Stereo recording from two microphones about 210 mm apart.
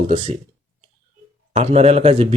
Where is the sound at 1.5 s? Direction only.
30° right (ahead or behind).